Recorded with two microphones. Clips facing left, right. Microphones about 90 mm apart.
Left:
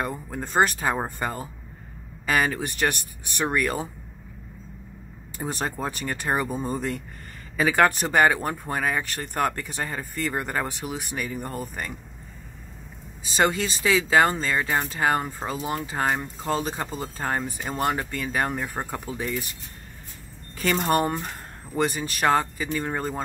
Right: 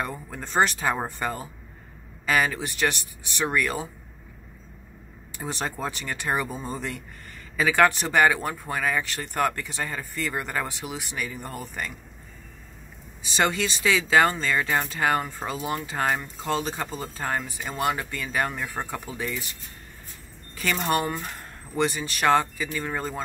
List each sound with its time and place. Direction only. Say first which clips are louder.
0.0 s speech: left 2 dB; 25° left (ahead or behind)
0.4 s speech: left 1 dB; 40° left (ahead or behind)
5.5 s speech: left 1 dB; 40° left (ahead or behind)
7.5 s speech: even; 30° left (ahead or behind)
13.3 s speech: left 2 dB; 30° left (ahead or behind)
16.2 s speech: left 1 dB; 40° left (ahead or behind)
20.9 s speech: left 3 dB; 35° left (ahead or behind)